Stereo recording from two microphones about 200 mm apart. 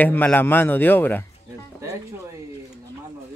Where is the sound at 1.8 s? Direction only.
15° right (ahead or behind).